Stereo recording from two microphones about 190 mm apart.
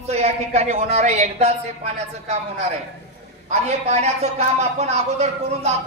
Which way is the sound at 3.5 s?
35° right (ahead or behind).